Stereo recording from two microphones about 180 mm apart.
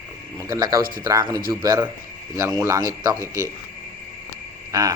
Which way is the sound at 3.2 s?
15° left (ahead or behind).